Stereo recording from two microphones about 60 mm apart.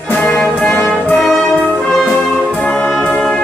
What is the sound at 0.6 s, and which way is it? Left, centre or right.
Music, left.